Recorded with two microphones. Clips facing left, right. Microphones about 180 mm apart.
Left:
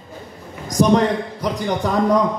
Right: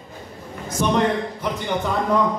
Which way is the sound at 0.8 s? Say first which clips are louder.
Left 4 dB; 35° left (ahead or behind).